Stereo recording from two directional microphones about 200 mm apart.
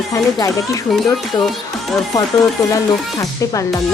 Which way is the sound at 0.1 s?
15° left (ahead or behind).